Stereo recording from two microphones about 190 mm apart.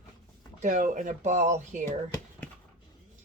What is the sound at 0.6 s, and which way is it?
Speech, 40° right (ahead or behind).